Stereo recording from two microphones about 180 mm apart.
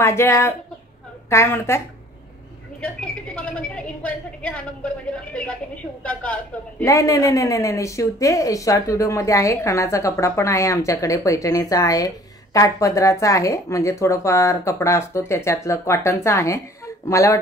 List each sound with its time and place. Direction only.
0.0 s speech: 15° left (ahead or behind)
2.8 s speech: 5° left (ahead or behind)